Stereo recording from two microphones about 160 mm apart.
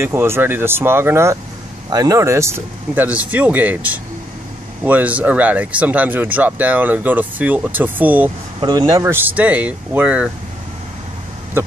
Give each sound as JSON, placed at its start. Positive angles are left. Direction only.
{"t": 0.0, "sound": "speech", "side_deg": -15}
{"t": 8.5, "sound": "speech", "side_deg": -30}
{"t": 9.0, "sound": "speech", "side_deg": -15}